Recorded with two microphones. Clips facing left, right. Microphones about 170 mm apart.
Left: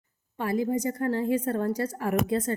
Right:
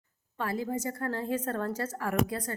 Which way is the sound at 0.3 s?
15° left (ahead or behind).